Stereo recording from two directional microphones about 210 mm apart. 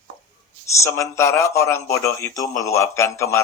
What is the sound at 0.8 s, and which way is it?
A man's voice, 15° left (ahead or behind).